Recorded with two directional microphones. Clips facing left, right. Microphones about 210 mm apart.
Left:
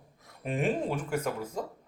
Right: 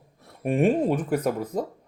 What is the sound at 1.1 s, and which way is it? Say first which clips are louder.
Speech: right 7 dB; 35° right (ahead or behind).